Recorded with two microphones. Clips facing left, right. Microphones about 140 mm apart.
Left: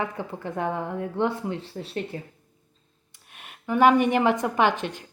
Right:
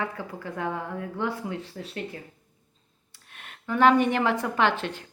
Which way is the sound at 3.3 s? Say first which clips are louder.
Left 3 dB; 10° left (ahead or behind).